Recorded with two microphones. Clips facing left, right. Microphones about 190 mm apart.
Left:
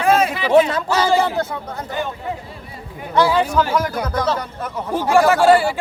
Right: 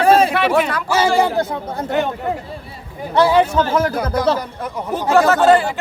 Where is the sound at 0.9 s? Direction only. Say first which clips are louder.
Right 2 dB; 10° right (ahead or behind).